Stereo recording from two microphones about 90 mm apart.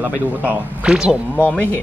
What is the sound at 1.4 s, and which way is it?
Speech, 15° left (ahead or behind).